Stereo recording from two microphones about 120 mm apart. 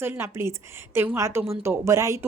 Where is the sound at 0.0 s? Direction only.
20° right (ahead or behind).